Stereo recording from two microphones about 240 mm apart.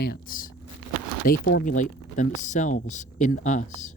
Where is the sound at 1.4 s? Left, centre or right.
Left.